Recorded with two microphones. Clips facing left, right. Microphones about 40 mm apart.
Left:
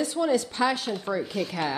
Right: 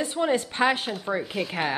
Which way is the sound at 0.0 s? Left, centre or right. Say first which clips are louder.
Even; right.